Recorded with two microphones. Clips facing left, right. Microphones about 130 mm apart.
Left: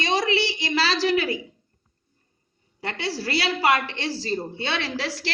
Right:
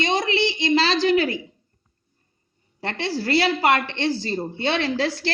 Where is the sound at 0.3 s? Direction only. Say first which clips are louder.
Right 3 dB; 25° right (ahead or behind).